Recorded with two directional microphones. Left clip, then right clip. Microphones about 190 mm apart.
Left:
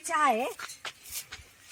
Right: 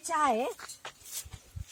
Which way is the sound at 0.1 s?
Centre (ahead or behind).